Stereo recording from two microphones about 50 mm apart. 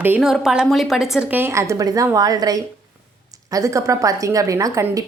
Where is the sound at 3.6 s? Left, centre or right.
Right.